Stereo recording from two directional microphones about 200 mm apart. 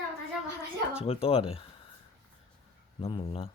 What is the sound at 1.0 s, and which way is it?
Speech, 30° left (ahead or behind).